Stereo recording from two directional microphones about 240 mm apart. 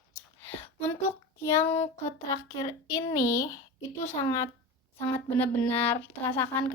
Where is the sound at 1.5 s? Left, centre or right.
Centre.